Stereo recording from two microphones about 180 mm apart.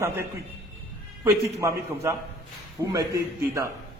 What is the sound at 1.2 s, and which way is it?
A man's voice, 15° right (ahead or behind).